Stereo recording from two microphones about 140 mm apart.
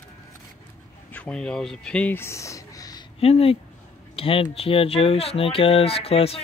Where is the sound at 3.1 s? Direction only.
45° left (ahead or behind).